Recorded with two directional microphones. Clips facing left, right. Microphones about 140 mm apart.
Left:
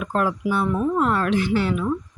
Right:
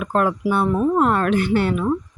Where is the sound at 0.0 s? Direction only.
55° right (ahead or behind).